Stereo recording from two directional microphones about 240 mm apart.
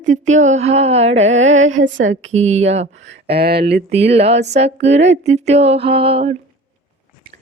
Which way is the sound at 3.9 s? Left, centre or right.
Right.